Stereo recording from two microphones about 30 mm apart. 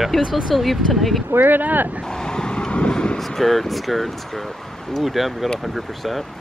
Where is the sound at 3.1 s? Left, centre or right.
Centre.